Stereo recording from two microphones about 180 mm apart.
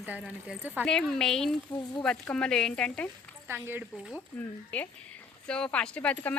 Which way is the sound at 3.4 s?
10° right (ahead or behind).